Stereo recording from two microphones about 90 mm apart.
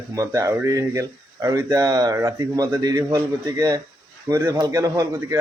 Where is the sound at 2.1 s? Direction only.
30° right (ahead or behind).